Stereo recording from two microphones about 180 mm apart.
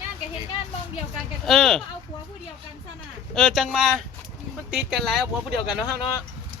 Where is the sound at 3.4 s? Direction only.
Centre (ahead or behind).